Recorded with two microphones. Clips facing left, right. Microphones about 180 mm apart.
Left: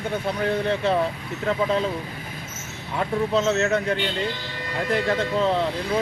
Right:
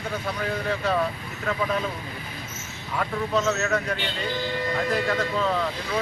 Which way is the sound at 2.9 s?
25° left (ahead or behind).